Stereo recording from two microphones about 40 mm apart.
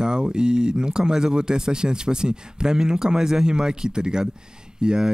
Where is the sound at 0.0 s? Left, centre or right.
Right.